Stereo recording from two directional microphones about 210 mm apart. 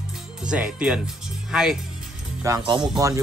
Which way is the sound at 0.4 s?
5° right (ahead or behind).